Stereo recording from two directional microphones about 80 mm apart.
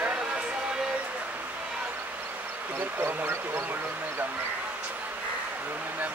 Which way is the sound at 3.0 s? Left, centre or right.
Right.